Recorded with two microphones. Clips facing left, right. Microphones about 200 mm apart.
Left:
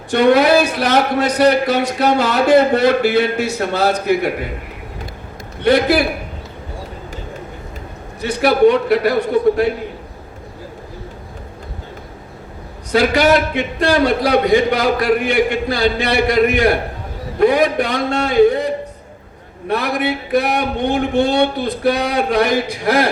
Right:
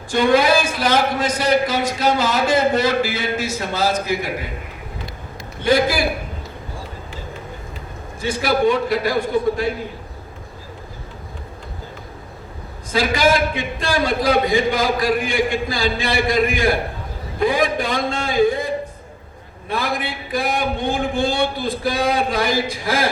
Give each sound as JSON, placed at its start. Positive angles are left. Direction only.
{"t": 0.1, "sound": "a man's voice", "side_deg": 65}
{"t": 5.6, "sound": "a man's voice", "side_deg": 65}
{"t": 8.2, "sound": "a man's voice", "side_deg": 65}
{"t": 12.9, "sound": "a man's voice", "side_deg": 65}